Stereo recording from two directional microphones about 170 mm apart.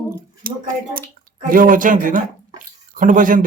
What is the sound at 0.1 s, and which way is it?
Speech, 55° right (ahead or behind).